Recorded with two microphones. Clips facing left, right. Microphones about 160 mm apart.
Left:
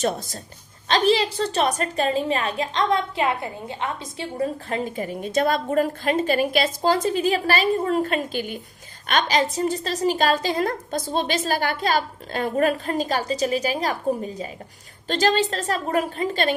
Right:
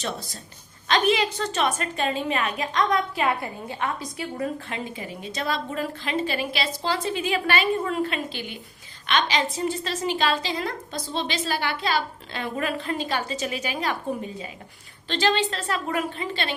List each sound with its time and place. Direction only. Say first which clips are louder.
0.0 s a woman's voice: left 7 dB; 45° left (ahead or behind)
0.9 s a woman's voice: left 2 dB; 35° left (ahead or behind)
4.7 s a woman's voice: left 6 dB; 45° left (ahead or behind)
15.0 s a woman's voice: left 3 dB; 45° left (ahead or behind)